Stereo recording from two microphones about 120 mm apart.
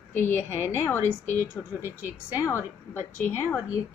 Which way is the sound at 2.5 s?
20° left (ahead or behind).